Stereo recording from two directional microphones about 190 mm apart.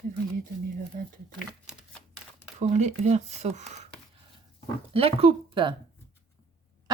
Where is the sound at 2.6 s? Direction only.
40° right (ahead or behind).